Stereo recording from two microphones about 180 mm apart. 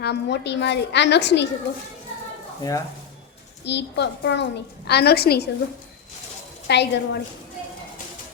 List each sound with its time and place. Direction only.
0.0 s a child's voice: 70° left (ahead or behind)
2.6 s speech: 20° left (ahead or behind)
3.6 s a child's voice: 70° left (ahead or behind)
6.7 s a child's voice: 70° left (ahead or behind)